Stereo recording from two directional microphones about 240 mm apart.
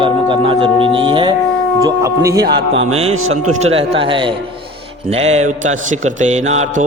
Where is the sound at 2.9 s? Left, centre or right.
Right.